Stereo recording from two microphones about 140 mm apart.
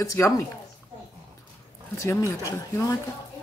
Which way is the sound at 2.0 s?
25° left (ahead or behind).